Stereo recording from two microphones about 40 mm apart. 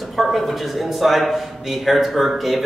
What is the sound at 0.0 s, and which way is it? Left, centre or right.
A man's voice, centre.